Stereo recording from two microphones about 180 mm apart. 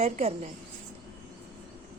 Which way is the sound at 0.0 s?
35° right (ahead or behind).